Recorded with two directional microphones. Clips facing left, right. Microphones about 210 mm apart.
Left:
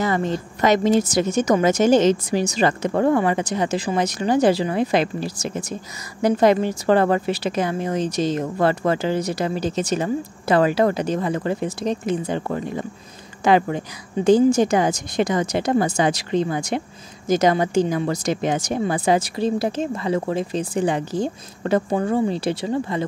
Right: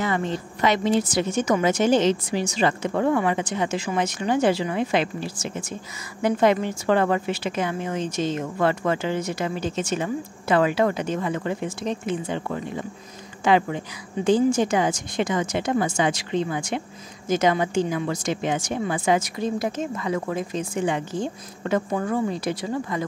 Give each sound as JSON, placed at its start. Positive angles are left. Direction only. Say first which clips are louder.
{"t": 0.0, "sound": "a woman's voice", "louder": "left 3 dB", "side_deg": 40}